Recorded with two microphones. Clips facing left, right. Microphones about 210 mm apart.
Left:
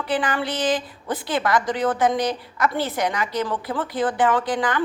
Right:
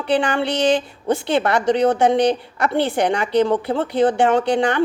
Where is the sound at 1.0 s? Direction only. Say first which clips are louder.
Right 5 dB; 25° right (ahead or behind).